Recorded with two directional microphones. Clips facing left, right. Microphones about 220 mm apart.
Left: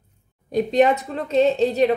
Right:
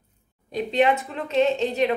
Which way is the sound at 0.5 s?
45° left (ahead or behind).